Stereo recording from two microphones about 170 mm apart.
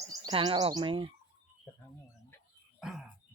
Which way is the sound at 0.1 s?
25° right (ahead or behind).